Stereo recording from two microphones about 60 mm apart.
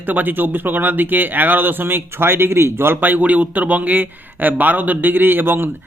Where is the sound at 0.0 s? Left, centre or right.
Right.